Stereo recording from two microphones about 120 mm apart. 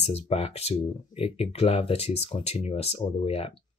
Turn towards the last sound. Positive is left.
turn(degrees=50)  # may be behind; listen again after turning